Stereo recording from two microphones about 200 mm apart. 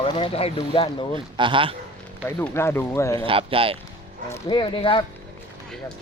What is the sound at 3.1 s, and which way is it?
Speech, 25° right (ahead or behind).